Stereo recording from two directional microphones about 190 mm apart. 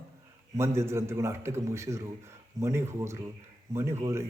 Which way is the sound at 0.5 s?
15° right (ahead or behind).